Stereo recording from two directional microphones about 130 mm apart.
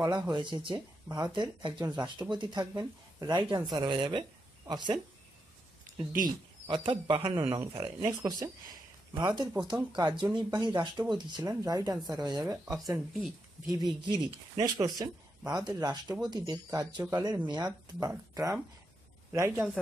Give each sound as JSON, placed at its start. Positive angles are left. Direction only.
{"t": 0.0, "sound": "speech", "side_deg": -30}
{"t": 6.2, "sound": "speech", "side_deg": -40}
{"t": 8.0, "sound": "speech", "side_deg": -25}
{"t": 12.9, "sound": "speech", "side_deg": -5}
{"t": 14.0, "sound": "speech", "side_deg": -35}